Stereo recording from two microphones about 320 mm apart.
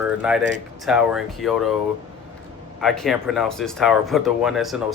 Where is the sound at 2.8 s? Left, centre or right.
Centre.